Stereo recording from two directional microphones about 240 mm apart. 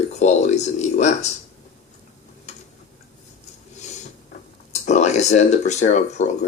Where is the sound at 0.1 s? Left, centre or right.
Left.